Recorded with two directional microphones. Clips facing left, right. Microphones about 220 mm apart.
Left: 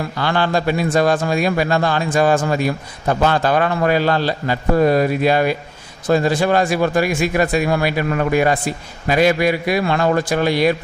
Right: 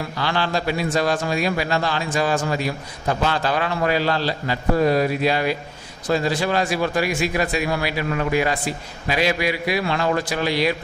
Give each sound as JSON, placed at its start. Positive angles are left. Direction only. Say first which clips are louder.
{"t": 0.2, "sound": "a man's voice", "louder": "left 5 dB", "side_deg": 50}